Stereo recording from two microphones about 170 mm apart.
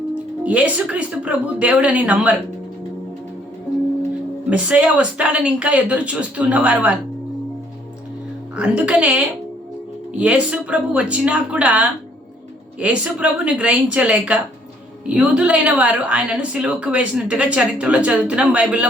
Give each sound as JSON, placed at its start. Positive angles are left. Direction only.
{"t": 0.1, "sound": "a woman's voice", "side_deg": -10}
{"t": 4.4, "sound": "a woman's voice", "side_deg": -5}
{"t": 8.5, "sound": "a woman's voice", "side_deg": -5}